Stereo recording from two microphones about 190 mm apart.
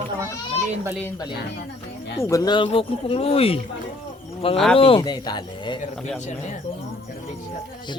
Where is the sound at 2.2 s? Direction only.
20° left (ahead or behind).